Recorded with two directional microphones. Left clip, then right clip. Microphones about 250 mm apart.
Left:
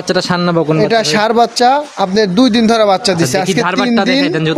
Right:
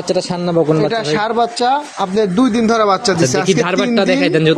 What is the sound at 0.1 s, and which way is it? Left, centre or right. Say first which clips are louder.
Speech: left 3 dB; left.